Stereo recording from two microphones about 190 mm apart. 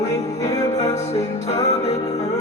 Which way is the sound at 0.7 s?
35° left (ahead or behind).